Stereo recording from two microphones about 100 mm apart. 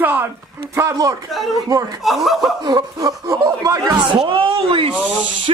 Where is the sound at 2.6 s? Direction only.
45° right (ahead or behind).